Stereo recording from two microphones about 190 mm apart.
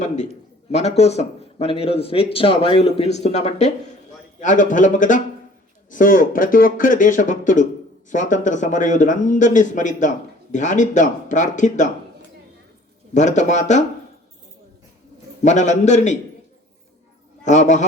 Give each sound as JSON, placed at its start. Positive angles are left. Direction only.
{"t": 0.7, "sound": "speech", "side_deg": 35}
{"t": 13.1, "sound": "speech", "side_deg": 40}
{"t": 15.4, "sound": "speech", "side_deg": 40}
{"t": 17.4, "sound": "a man's voice", "side_deg": 40}